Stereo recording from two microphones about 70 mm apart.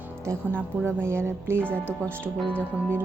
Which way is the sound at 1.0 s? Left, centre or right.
Right.